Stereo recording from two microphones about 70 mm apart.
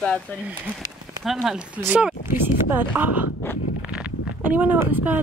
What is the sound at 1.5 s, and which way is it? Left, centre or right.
Speech, centre.